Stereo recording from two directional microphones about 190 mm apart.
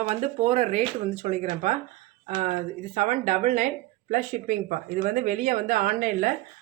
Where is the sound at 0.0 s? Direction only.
40° right (ahead or behind).